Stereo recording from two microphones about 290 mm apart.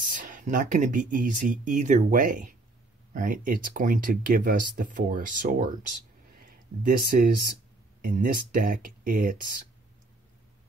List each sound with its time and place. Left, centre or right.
0.0 s speech: right